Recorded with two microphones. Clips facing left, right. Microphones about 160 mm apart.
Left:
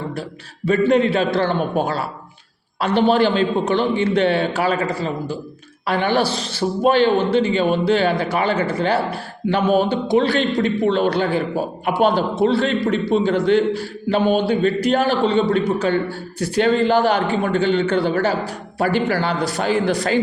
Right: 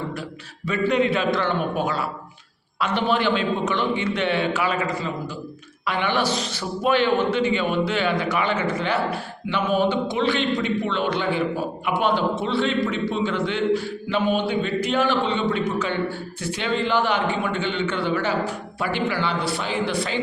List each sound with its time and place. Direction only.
0.2 s a man's voice: 35° left (ahead or behind)